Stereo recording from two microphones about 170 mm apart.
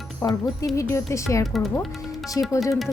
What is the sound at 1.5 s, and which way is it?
Speech, centre (ahead or behind).